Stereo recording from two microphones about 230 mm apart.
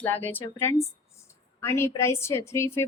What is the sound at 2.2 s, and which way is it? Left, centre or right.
Speech, centre.